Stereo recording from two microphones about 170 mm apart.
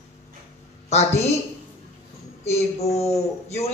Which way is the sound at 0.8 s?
40° left (ahead or behind).